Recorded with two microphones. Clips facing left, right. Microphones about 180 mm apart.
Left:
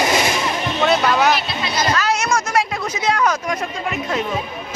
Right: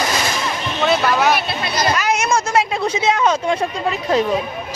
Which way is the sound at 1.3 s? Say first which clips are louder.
Right 2 dB; 60° right (ahead or behind).